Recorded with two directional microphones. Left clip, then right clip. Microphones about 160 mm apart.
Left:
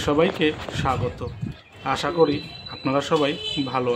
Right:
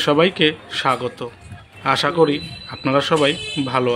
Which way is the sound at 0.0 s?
20° right (ahead or behind).